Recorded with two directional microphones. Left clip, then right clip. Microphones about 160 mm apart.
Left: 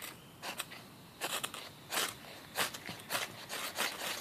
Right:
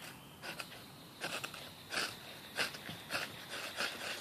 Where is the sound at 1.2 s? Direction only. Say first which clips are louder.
Left 3 dB; 20° left (ahead or behind).